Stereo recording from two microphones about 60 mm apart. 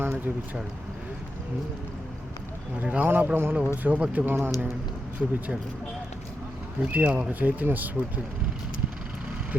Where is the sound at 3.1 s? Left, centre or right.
Right.